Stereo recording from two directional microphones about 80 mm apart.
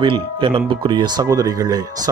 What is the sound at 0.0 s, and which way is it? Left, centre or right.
Speech, right.